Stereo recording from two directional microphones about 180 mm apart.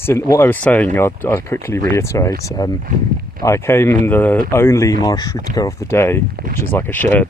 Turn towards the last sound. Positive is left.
turn(degrees=10)  # may be behind; listen again after turning